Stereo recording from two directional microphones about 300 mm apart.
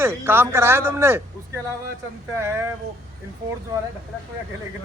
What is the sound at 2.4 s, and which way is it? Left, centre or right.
Speech, centre.